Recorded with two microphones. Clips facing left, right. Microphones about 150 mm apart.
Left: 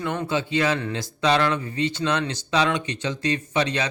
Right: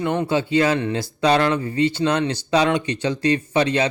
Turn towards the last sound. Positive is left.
turn(degrees=-30)  # may be behind; listen again after turning